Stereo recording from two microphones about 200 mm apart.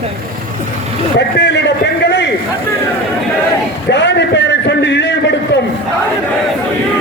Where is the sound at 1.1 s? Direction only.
60° left (ahead or behind).